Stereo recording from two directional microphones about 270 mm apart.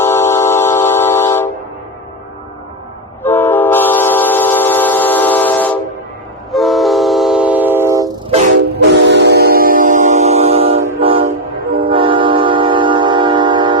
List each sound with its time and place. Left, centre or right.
0.0 s train: centre
3.2 s train: centre
9.0 s train: right; by 13.7 s centre